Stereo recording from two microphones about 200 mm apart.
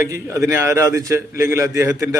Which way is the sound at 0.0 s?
15° right (ahead or behind).